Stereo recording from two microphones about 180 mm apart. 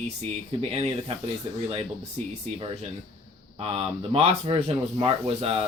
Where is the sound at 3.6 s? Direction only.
30° right (ahead or behind).